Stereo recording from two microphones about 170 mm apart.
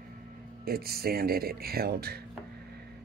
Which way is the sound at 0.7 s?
65° right (ahead or behind).